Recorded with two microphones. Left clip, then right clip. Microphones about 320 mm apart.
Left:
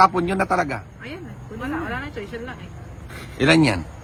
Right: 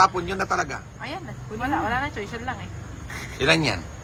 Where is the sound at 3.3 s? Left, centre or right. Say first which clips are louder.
Left 4 dB; left.